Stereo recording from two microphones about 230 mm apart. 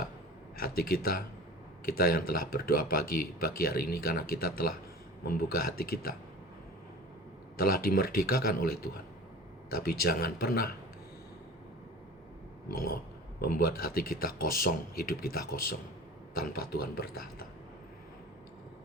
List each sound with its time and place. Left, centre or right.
0.5 s speech: left
7.5 s speech: left
13.4 s speech: left